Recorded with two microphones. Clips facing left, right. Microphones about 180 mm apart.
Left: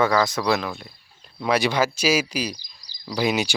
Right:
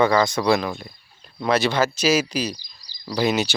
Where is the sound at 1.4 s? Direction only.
10° left (ahead or behind).